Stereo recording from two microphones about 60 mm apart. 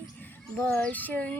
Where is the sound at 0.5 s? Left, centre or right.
Left.